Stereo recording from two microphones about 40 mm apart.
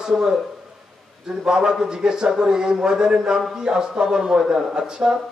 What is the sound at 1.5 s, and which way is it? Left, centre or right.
A man's voice, centre.